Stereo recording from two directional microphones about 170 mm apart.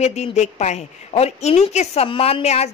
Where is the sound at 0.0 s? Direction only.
40° left (ahead or behind).